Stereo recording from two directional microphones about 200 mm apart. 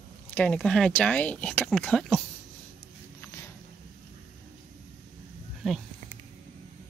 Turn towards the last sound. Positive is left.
turn(degrees=0)  # may be behind; listen again after turning